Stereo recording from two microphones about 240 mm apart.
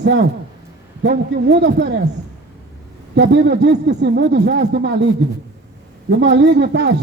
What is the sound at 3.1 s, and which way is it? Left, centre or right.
A man's voice, right.